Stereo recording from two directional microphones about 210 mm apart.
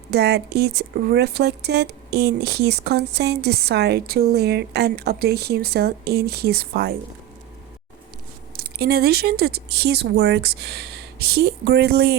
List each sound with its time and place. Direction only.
0.1 s speech: 50° right (ahead or behind)
8.5 s speech: 45° right (ahead or behind)